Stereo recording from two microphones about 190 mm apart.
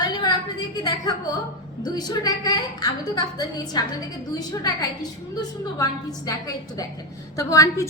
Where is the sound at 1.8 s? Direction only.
20° left (ahead or behind).